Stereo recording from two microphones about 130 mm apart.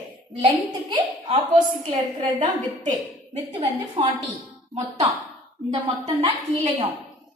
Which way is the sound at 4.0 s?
55° right (ahead or behind).